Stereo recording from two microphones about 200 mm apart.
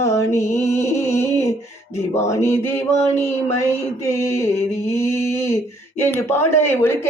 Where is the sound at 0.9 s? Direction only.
35° left (ahead or behind).